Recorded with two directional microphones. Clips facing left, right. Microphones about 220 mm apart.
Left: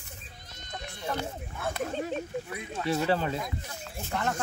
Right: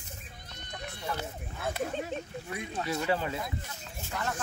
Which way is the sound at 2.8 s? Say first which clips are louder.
Left 4 dB; 40° left (ahead or behind).